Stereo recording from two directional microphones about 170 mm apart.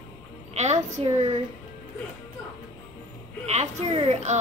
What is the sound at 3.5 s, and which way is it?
Speech, 40° right (ahead or behind).